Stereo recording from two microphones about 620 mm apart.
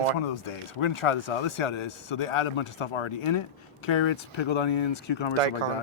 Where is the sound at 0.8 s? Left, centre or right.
Left.